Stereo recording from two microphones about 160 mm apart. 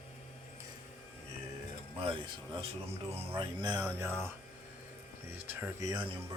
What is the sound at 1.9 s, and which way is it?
Speech, 30° right (ahead or behind).